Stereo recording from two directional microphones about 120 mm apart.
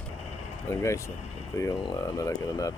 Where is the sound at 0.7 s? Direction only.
25° left (ahead or behind).